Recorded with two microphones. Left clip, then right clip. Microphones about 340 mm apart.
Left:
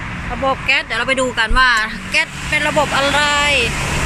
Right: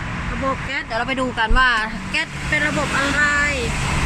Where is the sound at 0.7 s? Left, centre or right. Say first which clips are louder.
Left 7 dB; centre.